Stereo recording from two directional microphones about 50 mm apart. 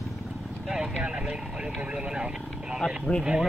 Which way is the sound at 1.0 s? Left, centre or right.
Right.